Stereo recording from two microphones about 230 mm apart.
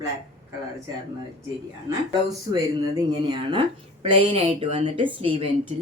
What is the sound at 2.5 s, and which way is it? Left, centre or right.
A woman's voice, centre.